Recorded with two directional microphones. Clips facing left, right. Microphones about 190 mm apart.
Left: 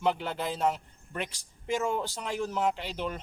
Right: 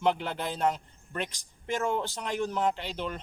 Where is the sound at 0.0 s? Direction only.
Centre (ahead or behind).